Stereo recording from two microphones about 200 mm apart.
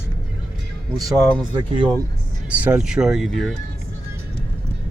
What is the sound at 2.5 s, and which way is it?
Speech, 5° right (ahead or behind).